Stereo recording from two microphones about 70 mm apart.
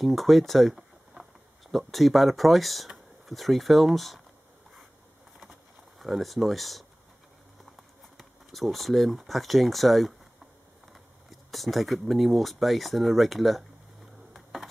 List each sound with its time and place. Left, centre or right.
0.0 s speech: centre
5.9 s speech: centre
14.3 s a sound: centre